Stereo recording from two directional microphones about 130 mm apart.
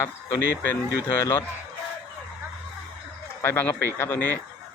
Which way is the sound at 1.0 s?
25° left (ahead or behind).